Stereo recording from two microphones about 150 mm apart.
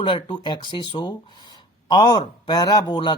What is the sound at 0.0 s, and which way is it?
Speech, 35° left (ahead or behind).